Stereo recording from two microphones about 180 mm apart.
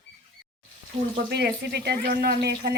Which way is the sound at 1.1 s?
65° right (ahead or behind).